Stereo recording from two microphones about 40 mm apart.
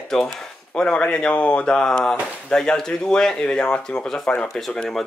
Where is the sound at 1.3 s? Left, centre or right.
Left.